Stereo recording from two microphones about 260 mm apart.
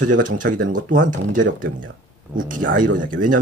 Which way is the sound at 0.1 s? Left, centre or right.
Right.